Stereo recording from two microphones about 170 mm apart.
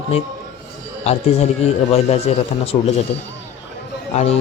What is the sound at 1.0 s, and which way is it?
A man's voice, 40° left (ahead or behind).